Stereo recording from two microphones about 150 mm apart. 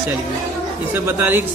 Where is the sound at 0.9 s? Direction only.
15° right (ahead or behind).